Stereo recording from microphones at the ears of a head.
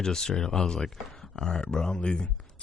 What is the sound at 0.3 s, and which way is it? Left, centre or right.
Speech, left.